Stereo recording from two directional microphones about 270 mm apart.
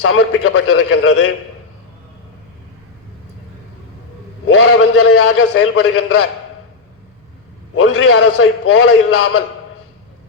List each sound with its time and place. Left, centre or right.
0.0 s a man's voice: left
4.4 s a man's voice: left
7.8 s a man's voice: left